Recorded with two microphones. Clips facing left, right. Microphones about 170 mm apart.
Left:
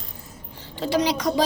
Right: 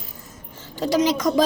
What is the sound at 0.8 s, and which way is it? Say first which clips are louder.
Speech: right 3 dB; 45° right (ahead or behind).